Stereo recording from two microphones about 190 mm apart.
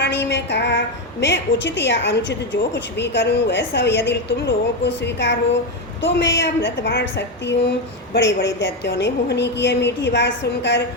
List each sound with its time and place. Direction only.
0.0 s a woman's voice: 65° left (ahead or behind)